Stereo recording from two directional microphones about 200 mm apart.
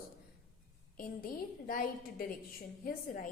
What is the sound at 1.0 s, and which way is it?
A woman's voice, 45° left (ahead or behind).